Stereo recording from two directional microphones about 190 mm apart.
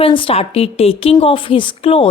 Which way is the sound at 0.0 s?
30° left (ahead or behind).